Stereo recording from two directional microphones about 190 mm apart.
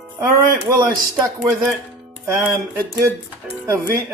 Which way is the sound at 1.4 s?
15° right (ahead or behind).